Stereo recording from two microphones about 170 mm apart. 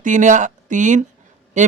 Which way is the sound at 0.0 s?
45° right (ahead or behind).